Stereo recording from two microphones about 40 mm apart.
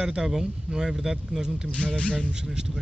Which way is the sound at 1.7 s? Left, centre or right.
Left.